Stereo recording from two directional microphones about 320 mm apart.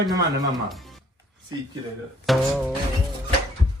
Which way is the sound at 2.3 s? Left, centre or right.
Centre.